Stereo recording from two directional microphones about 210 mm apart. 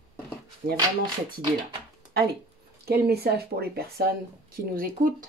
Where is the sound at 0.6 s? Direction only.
45° right (ahead or behind).